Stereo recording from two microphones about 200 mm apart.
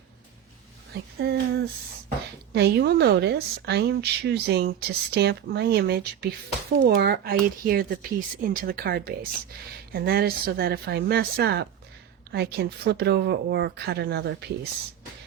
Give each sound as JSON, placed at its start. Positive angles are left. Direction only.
{"t": 1.2, "sound": "speech", "side_deg": -55}